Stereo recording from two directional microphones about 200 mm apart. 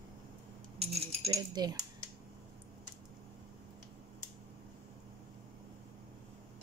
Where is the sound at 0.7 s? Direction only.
30° right (ahead or behind).